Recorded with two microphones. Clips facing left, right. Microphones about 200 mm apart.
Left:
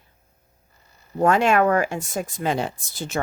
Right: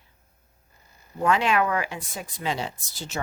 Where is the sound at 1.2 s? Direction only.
45° left (ahead or behind).